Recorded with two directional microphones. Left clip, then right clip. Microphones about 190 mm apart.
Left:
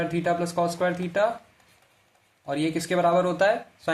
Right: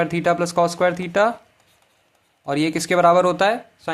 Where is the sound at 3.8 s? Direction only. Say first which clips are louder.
Even; 15° right (ahead or behind).